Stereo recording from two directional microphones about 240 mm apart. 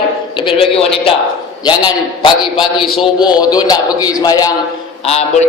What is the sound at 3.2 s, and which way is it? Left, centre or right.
A man's voice, centre.